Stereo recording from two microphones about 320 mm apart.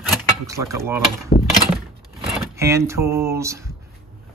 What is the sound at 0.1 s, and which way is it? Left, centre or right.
Speech, centre.